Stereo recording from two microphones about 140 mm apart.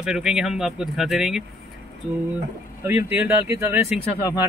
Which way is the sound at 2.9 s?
15° right (ahead or behind).